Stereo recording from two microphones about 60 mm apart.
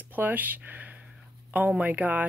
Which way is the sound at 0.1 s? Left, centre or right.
Right.